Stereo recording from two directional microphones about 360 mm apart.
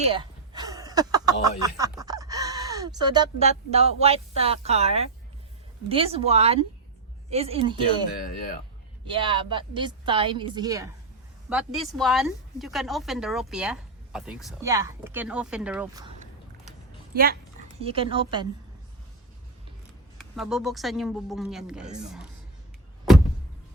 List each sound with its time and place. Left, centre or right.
0.0 s a woman's voice: centre
9.0 s a woman's voice: centre
17.2 s speech: right
20.1 s a woman's voice: centre